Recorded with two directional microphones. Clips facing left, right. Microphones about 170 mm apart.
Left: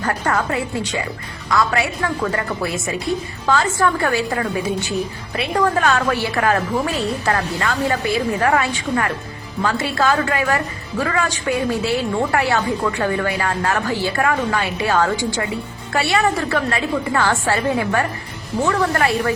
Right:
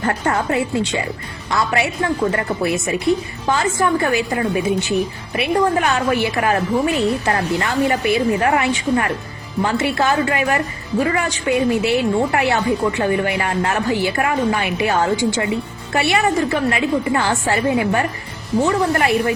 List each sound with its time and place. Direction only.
0.3 s a woman's voice: 25° right (ahead or behind)